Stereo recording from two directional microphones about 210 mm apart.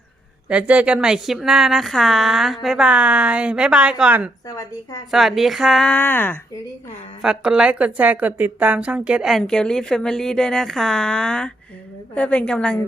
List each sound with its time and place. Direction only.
0.4 s speech: 5° right (ahead or behind)
4.4 s a woman's voice: 15° left (ahead or behind)
5.1 s speech: centre (ahead or behind)
7.2 s speech: 5° right (ahead or behind)